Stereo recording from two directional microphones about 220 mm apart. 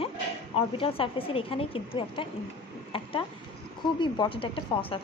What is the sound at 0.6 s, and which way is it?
Speech, 25° left (ahead or behind).